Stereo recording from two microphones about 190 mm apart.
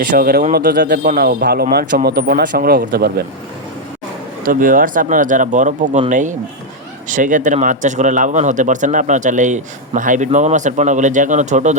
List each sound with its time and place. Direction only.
0.1 s a man's voice: 50° right (ahead or behind)
1.7 s a man's voice: 45° right (ahead or behind)
2.0 s a man's voice: 55° right (ahead or behind)
4.4 s a man's voice: 45° right (ahead or behind)